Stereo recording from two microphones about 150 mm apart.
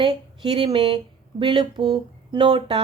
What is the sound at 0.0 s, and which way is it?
A woman's voice, 30° right (ahead or behind).